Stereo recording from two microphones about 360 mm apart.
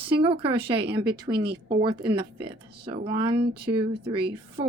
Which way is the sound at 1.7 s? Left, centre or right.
Centre.